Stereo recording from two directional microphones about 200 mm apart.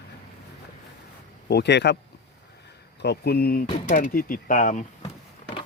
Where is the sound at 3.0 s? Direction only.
55° left (ahead or behind).